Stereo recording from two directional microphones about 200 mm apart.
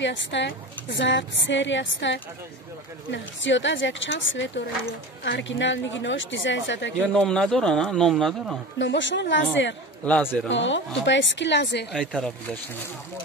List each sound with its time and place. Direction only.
0.0 s speech: 65° left (ahead or behind)
7.2 s speech: centre (ahead or behind)
8.7 s speech: 65° left (ahead or behind)
10.0 s a man's voice: 10° left (ahead or behind)
10.5 s speech: 65° left (ahead or behind)
11.9 s speech: 5° left (ahead or behind)